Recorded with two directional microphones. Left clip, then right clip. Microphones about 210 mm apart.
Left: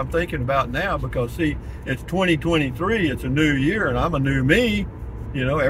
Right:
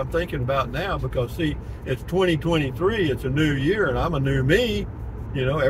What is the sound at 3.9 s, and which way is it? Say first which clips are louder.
Speech: left 2 dB; 15° left (ahead or behind).